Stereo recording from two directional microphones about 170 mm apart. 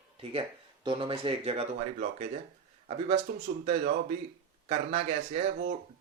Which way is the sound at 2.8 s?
40° right (ahead or behind).